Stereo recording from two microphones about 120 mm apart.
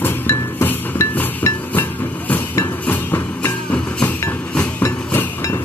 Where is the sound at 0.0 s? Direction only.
20° left (ahead or behind).